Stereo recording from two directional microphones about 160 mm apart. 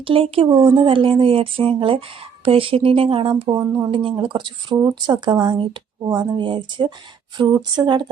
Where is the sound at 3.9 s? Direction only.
30° right (ahead or behind).